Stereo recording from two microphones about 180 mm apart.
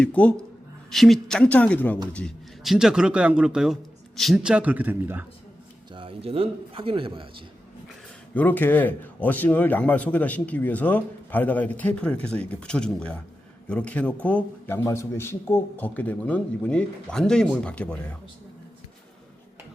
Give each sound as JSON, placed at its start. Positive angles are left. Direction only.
{"t": 0.0, "sound": "a man's voice", "side_deg": 5}
{"t": 5.9, "sound": "a man's voice", "side_deg": -30}
{"t": 8.3, "sound": "speech", "side_deg": 10}